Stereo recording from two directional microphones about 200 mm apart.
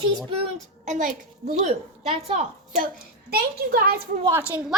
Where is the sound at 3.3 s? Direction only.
50° right (ahead or behind).